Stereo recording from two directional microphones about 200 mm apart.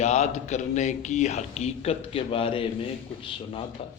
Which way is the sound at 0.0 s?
35° left (ahead or behind).